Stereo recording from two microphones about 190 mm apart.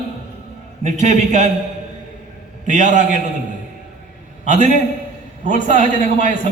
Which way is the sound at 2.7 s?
40° right (ahead or behind).